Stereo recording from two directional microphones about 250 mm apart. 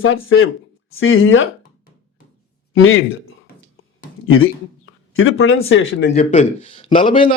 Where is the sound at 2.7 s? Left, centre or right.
Left.